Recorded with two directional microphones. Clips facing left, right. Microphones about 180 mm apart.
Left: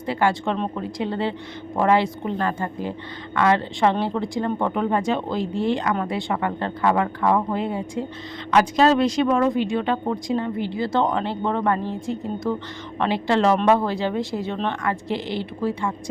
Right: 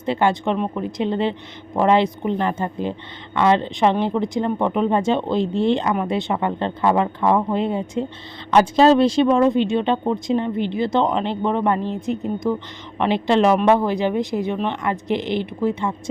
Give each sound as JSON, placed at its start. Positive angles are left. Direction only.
{"t": 0.0, "sound": "a woman's voice", "side_deg": -20}